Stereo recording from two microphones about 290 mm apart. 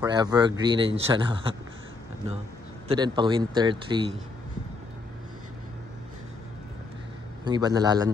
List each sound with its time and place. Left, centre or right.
0.0 s speech: centre
2.9 s speech: centre
7.4 s speech: centre